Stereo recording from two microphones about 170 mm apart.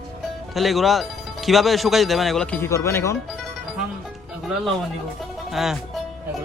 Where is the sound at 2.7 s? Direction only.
15° left (ahead or behind).